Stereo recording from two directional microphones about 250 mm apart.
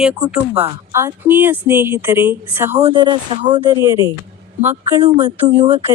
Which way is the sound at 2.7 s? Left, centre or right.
Right.